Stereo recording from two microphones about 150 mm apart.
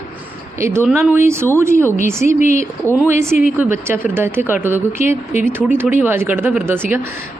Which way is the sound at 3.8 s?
15° right (ahead or behind).